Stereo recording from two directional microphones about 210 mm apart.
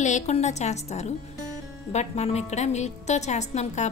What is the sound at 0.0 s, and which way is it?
A woman's voice, 35° left (ahead or behind).